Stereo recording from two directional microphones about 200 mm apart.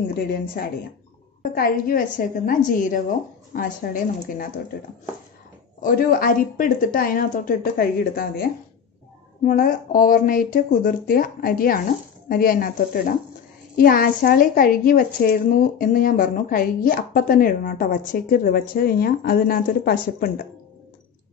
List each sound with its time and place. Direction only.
1.5 s a woman's voice: 45° left (ahead or behind)
5.8 s speech: 45° left (ahead or behind)